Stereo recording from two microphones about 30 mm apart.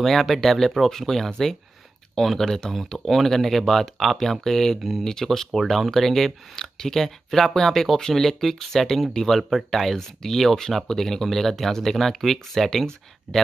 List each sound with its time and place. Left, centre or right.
0.0 s speech: centre